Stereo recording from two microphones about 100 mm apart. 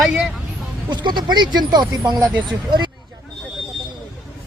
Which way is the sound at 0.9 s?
50° right (ahead or behind).